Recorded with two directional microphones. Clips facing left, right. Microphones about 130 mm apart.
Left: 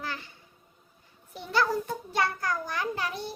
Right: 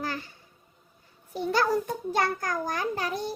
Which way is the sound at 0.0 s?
40° right (ahead or behind).